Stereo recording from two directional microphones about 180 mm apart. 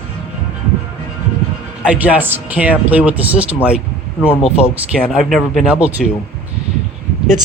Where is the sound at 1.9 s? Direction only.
10° right (ahead or behind).